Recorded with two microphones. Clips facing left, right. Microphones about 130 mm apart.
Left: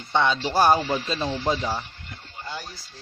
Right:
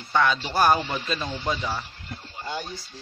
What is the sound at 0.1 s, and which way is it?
Music, 25° left (ahead or behind).